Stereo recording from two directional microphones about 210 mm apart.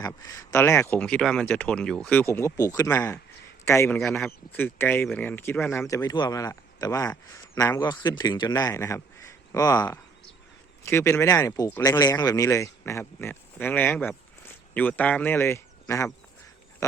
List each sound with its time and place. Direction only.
0.0 s speech: 15° left (ahead or behind)